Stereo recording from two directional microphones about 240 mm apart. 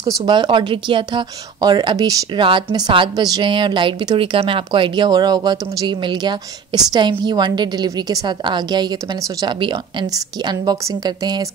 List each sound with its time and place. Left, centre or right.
0.2 s speech: centre